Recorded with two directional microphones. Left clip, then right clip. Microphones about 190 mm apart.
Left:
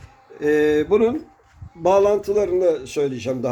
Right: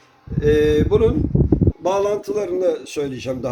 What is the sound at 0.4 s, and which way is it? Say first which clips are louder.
A man's voice: right 2 dB; 40° left (ahead or behind).